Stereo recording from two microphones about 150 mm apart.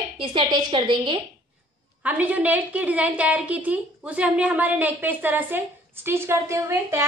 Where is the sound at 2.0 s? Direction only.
10° right (ahead or behind).